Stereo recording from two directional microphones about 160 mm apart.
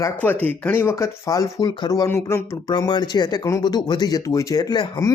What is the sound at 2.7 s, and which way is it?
Speech, 30° left (ahead or behind).